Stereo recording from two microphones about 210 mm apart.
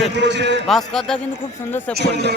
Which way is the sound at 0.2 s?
55° right (ahead or behind).